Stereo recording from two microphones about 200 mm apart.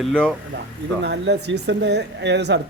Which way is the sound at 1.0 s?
60° right (ahead or behind).